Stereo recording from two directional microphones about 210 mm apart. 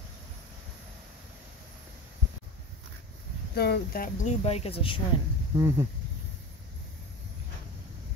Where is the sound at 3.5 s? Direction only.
50° left (ahead or behind).